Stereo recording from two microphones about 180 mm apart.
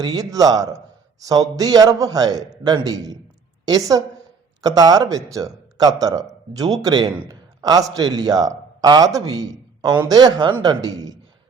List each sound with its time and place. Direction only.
0.0 s a man's voice: 20° right (ahead or behind)